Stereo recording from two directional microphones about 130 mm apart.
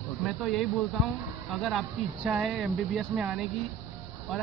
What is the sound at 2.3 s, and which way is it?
Speech, centre (ahead or behind).